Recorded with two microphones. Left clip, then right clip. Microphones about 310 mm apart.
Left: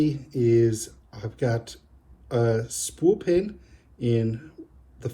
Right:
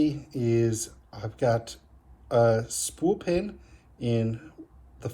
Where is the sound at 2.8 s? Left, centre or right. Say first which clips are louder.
Left 4 dB; centre.